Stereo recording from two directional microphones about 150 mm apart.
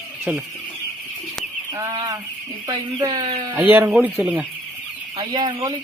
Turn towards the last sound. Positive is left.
turn(degrees=-30)  # may be behind; listen again after turning